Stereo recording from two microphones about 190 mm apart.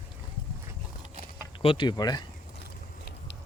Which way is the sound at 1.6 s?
25° left (ahead or behind).